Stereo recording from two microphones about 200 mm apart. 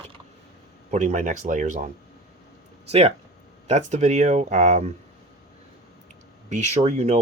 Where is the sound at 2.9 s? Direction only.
30° right (ahead or behind).